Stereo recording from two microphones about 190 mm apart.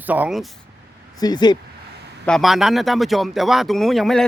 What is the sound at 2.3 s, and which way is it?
Speech, centre (ahead or behind).